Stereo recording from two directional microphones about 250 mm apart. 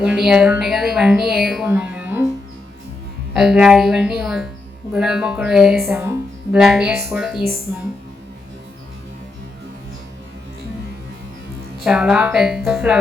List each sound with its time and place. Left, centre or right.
0.0 s a woman's voice: centre
3.3 s a woman's voice: centre
7.4 s speech: right
11.8 s a woman's voice: centre